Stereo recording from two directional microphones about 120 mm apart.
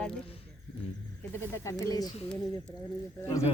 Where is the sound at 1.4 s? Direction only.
20° left (ahead or behind).